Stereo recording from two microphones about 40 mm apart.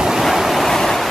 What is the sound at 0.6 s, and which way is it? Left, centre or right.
Waves, centre.